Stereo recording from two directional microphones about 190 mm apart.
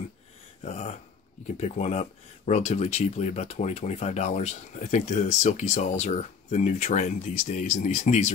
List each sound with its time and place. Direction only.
0.7 s speech: 35° left (ahead or behind)